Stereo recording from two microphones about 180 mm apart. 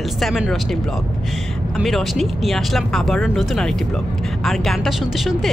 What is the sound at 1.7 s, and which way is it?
Speech, centre (ahead or behind).